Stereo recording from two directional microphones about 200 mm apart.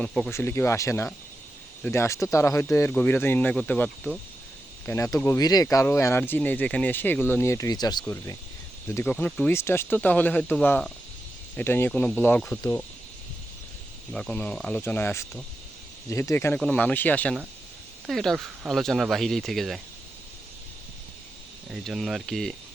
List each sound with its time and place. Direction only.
0.0 s speech: 5° left (ahead or behind)
14.1 s speech: 5° left (ahead or behind)
21.7 s speech: centre (ahead or behind)